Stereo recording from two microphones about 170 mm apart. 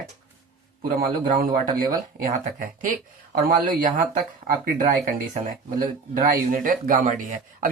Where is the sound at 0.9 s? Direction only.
55° right (ahead or behind).